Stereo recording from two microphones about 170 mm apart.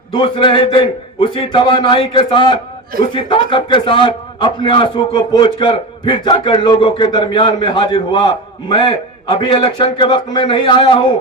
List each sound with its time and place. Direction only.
0.1 s a man's voice: 30° left (ahead or behind)